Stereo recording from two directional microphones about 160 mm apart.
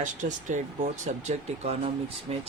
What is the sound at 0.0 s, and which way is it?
Speech, 50° right (ahead or behind).